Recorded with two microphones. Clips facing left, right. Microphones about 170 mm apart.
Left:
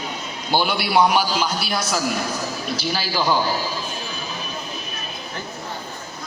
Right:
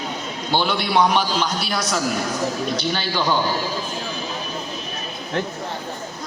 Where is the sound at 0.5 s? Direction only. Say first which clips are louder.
Left 1 dB; 10° left (ahead or behind).